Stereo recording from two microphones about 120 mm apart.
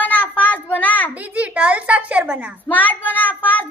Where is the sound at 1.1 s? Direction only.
10° right (ahead or behind).